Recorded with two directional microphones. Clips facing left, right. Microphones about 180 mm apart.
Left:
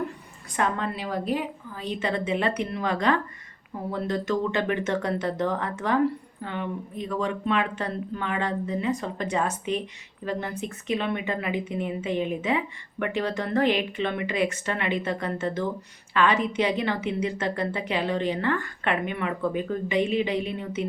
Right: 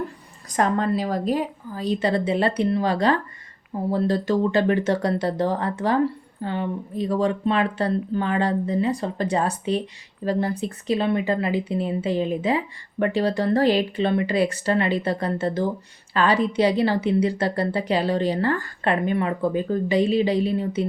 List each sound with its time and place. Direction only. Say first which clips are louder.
0.5 s speech: right 6 dB; 40° right (ahead or behind)